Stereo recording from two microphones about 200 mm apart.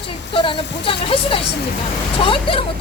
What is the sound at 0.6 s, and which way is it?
Speech, 60° left (ahead or behind).